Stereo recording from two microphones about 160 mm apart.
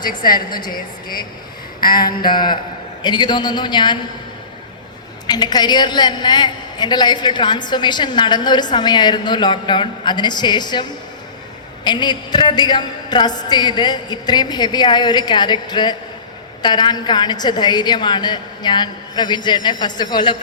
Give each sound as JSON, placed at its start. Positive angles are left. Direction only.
{"t": 0.1, "sound": "a woman's voice", "side_deg": 65}
{"t": 1.9, "sound": "a man's voice", "side_deg": 25}
{"t": 5.2, "sound": "a man's voice", "side_deg": 25}
{"t": 11.9, "sound": "a man's voice", "side_deg": 25}